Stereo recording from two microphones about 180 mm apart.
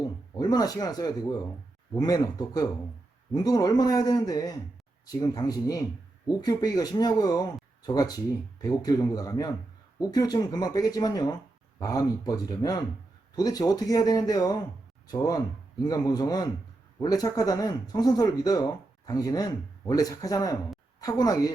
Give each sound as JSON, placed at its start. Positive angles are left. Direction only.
{"t": 0.3, "sound": "speech", "side_deg": 20}